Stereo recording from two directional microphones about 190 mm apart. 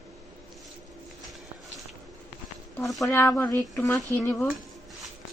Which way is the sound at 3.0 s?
15° left (ahead or behind).